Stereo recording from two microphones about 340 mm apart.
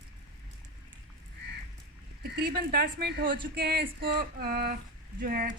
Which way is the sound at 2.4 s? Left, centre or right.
Right.